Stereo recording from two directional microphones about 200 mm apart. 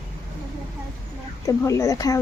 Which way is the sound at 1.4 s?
15° left (ahead or behind).